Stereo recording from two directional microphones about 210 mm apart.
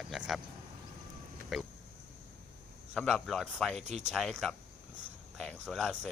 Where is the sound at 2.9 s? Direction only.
Centre (ahead or behind).